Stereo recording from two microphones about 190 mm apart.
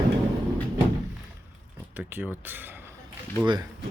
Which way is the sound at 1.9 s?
10° right (ahead or behind).